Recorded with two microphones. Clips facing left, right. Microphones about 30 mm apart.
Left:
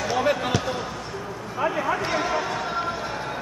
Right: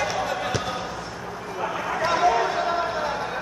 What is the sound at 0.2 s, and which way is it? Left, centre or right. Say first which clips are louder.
Basketball bounce: left 4 dB; left.